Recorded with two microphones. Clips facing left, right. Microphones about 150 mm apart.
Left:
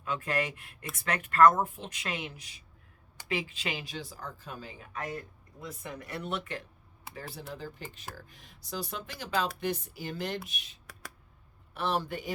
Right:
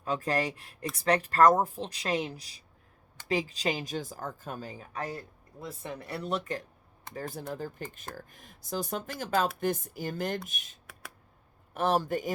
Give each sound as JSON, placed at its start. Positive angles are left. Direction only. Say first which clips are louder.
{"t": 0.0, "sound": "speech", "louder": "right 3 dB", "side_deg": -35}